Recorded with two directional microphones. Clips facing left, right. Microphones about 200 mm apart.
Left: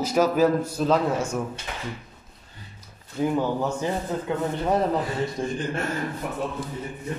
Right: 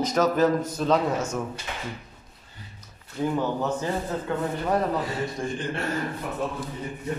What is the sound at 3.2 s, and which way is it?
A man's voice, 10° left (ahead or behind).